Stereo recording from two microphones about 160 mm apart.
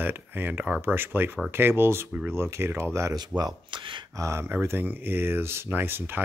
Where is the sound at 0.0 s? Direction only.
10° right (ahead or behind); by 4.0 s 30° right (ahead or behind).